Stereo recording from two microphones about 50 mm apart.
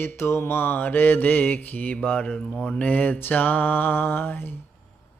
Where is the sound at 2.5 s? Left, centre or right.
Centre.